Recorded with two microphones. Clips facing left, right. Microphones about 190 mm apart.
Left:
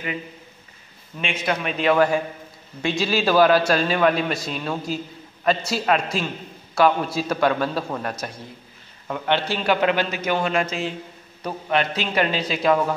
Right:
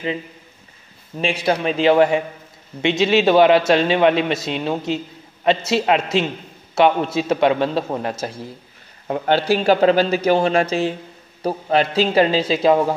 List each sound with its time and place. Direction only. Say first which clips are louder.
1.1 s a man's voice: right 6 dB; 35° right (ahead or behind)
9.0 s a man's voice: right 5 dB; 35° right (ahead or behind)